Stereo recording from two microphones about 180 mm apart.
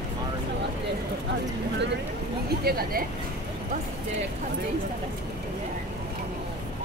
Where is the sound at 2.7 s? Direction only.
60° right (ahead or behind).